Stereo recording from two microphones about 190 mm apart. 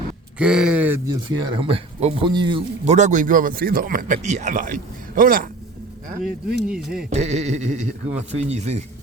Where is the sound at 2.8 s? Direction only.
35° right (ahead or behind).